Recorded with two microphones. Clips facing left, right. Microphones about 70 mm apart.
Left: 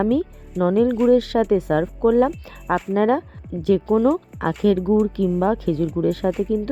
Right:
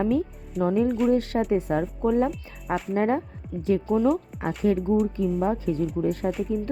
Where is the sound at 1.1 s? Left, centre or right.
Left.